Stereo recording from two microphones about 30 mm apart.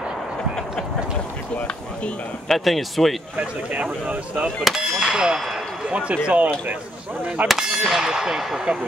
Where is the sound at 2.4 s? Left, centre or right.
Centre.